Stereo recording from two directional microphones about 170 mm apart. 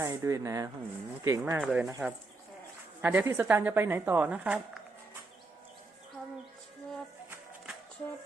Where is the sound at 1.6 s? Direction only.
Centre (ahead or behind).